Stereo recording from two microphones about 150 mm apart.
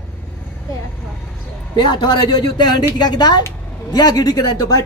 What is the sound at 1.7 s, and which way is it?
A woman's voice, 30° left (ahead or behind).